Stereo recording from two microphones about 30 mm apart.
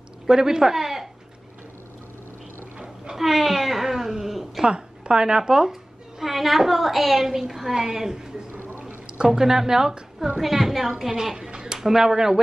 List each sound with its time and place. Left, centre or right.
0.3 s speech: right
3.2 s cat: centre
4.6 s a woman's voice: right
8.8 s speech: right
10.4 s a woman's voice: centre
11.3 s a sound: right
11.8 s a woman's voice: centre